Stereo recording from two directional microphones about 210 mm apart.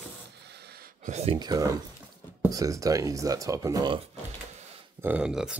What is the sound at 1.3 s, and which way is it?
Speech, 20° right (ahead or behind).